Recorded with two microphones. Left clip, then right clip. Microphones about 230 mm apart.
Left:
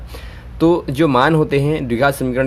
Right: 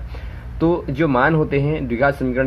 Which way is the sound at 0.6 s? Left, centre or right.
Left.